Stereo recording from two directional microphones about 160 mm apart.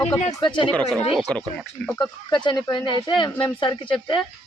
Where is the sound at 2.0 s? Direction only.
30° left (ahead or behind).